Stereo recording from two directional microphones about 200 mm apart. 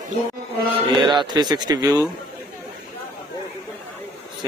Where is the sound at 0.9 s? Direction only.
20° right (ahead or behind).